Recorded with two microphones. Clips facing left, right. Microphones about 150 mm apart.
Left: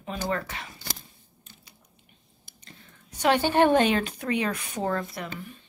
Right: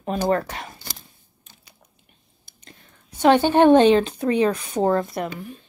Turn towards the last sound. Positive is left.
turn(degrees=-35)  # may be behind; listen again after turning